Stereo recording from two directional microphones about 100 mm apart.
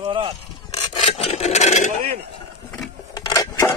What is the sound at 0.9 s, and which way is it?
Rub, 90° left.